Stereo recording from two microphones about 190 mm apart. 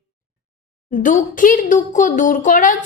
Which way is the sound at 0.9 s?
45° left (ahead or behind).